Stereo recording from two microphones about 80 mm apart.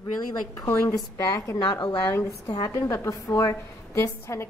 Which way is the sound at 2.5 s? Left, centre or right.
Left.